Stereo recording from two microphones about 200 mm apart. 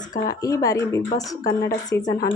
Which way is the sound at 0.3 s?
15° left (ahead or behind).